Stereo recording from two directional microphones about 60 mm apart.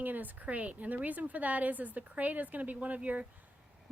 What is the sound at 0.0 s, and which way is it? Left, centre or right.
A woman's voice, right.